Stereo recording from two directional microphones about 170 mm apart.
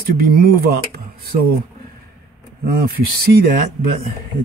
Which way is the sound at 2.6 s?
60° right (ahead or behind).